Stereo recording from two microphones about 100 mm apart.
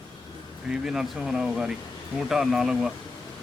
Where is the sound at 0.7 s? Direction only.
5° right (ahead or behind).